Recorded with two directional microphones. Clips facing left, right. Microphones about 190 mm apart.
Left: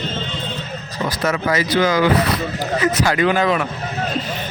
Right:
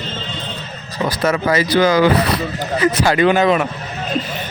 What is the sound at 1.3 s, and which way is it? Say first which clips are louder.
Speech: right 3 dB; 30° right (ahead or behind).